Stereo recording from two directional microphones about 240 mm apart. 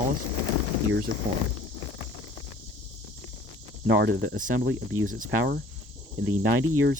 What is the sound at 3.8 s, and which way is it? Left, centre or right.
Speech, right.